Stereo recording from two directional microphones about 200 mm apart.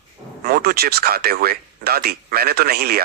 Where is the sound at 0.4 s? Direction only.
50° right (ahead or behind).